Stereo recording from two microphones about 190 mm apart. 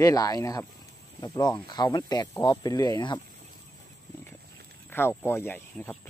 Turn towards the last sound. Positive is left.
turn(degrees=10)  # may be behind; listen again after turning